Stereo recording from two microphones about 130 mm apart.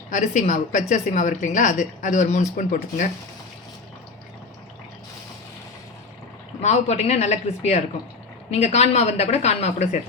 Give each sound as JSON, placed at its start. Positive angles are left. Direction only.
{"t": 0.1, "sound": "a woman's voice", "side_deg": 70}
{"t": 6.6, "sound": "a woman's voice", "side_deg": 60}